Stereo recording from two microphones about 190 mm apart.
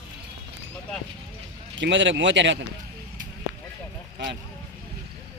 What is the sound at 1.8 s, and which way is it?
Speech, 75° right (ahead or behind).